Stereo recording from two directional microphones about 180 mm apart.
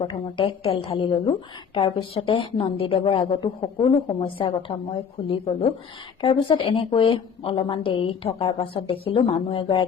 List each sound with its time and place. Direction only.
0.0 s a woman's voice: 30° left (ahead or behind)